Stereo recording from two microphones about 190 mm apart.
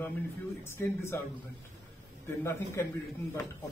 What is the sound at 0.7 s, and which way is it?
Speech, 15° left (ahead or behind).